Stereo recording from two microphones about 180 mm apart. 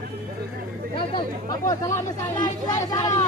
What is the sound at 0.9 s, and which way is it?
Speech, 25° left (ahead or behind).